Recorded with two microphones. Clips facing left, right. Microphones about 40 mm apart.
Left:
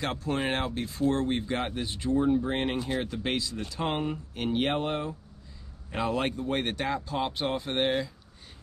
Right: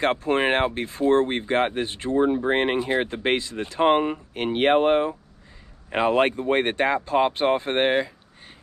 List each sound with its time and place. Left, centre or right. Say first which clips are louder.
0.0 s speech: right 8 dB; right